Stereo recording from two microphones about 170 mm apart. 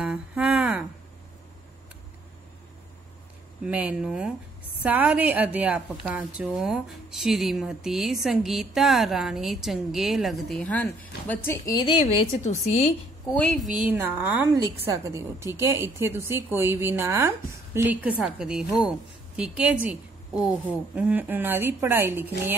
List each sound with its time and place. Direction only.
0.0 s a sound: 5° right (ahead or behind)
3.6 s a woman's voice: 5° right (ahead or behind); by 12.0 s 25° left (ahead or behind)
12.4 s a woman's voice: 45° left (ahead or behind)
13.3 s a woman's voice: 5° left (ahead or behind); by 22.3 s 10° right (ahead or behind)